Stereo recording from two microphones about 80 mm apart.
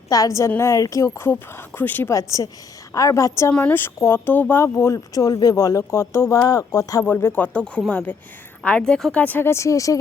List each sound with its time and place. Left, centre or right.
0.1 s speech: left
2.0 s speech: left
3.7 s speech: left
4.6 s speech: left
7.0 s a woman's voice: left; by 9.1 s centre
9.1 s speech: centre
9.5 s speech: left